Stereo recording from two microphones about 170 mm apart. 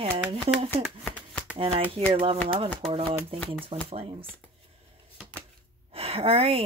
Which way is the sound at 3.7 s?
30° right (ahead or behind).